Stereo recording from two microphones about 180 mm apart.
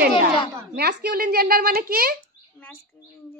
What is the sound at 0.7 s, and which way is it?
A woman's voice, 65° right (ahead or behind).